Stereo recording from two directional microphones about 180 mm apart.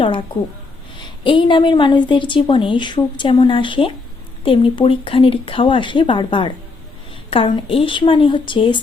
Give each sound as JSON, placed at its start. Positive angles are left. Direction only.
{"t": 0.9, "sound": "a woman's voice", "side_deg": 25}